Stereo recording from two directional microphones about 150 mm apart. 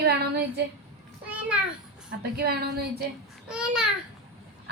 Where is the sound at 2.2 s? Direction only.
90° right.